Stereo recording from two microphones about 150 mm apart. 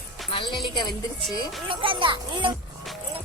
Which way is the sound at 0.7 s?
30° left (ahead or behind).